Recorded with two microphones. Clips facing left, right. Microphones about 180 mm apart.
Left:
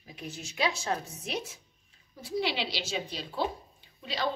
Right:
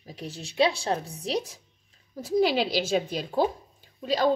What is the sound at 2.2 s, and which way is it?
A woman's voice, 45° right (ahead or behind).